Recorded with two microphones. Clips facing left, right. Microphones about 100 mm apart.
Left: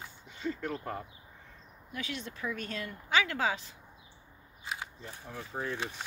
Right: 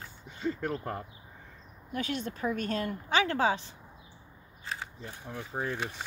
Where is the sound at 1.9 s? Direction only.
45° right (ahead or behind); by 3.6 s 30° right (ahead or behind).